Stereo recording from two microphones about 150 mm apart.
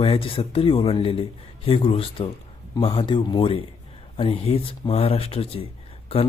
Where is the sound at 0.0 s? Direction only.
40° left (ahead or behind).